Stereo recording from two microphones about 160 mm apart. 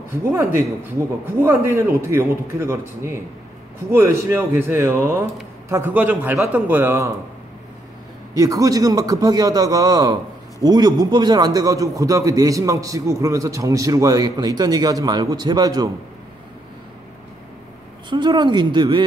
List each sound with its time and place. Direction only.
0.1 s a man's voice: 15° right (ahead or behind)
8.4 s a man's voice: 20° right (ahead or behind)
18.1 s a man's voice: 30° right (ahead or behind)